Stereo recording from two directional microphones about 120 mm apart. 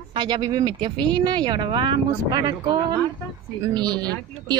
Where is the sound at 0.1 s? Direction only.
35° right (ahead or behind).